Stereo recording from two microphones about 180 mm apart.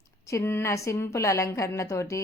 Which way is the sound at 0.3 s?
15° left (ahead or behind).